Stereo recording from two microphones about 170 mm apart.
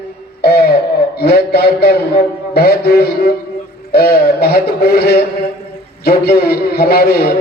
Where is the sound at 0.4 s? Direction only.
70° left (ahead or behind).